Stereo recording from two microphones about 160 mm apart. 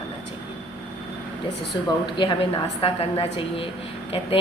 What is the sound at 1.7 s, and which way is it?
A woman's voice, 25° left (ahead or behind).